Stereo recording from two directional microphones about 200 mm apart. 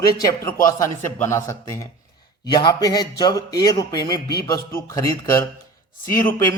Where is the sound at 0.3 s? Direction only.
15° left (ahead or behind).